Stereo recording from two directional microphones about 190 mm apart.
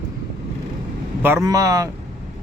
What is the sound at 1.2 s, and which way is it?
Speech, 15° right (ahead or behind).